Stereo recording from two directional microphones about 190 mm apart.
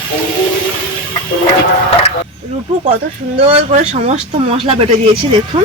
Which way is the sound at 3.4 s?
30° right (ahead or behind).